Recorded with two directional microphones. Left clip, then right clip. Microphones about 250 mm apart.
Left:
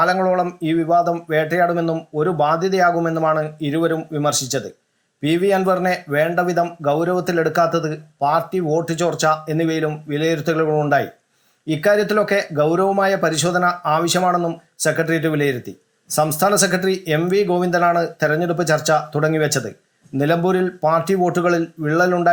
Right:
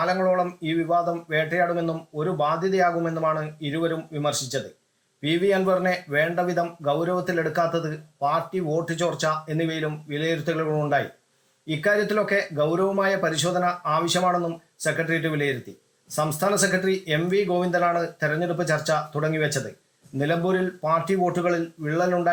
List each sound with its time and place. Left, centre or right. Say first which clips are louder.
0.0 s speech: left 5 dB; centre